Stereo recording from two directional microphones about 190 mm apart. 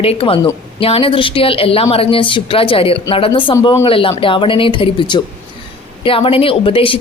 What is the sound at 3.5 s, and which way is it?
Speech, 15° left (ahead or behind).